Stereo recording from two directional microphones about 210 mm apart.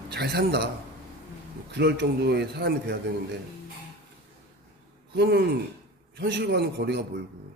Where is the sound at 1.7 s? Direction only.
55° right (ahead or behind).